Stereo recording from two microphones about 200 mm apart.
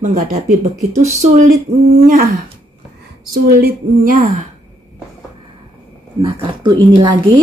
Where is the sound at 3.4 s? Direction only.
45° right (ahead or behind).